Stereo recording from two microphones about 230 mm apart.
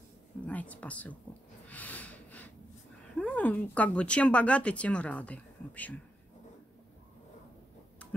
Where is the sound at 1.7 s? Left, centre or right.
Centre.